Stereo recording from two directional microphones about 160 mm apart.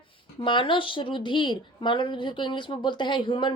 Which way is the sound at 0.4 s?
30° left (ahead or behind).